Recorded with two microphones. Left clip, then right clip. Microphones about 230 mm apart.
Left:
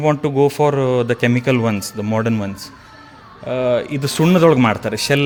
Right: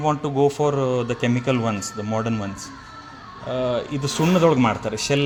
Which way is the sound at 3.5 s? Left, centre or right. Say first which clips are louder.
Left 6 dB; left.